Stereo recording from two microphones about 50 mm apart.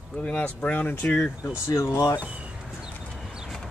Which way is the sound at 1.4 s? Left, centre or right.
Left.